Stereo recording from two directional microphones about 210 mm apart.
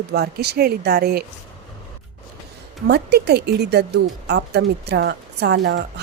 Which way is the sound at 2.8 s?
50° right (ahead or behind).